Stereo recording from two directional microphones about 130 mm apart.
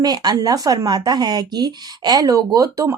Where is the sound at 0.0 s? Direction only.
30° right (ahead or behind).